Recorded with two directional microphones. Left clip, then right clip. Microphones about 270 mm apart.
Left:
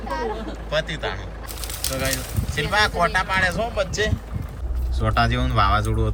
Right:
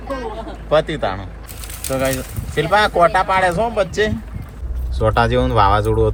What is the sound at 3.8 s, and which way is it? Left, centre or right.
Speech, right.